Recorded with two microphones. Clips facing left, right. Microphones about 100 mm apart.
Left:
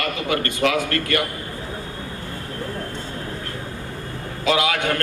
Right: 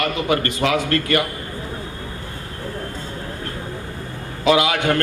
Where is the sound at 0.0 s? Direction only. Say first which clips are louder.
Right 3 dB; 25° right (ahead or behind).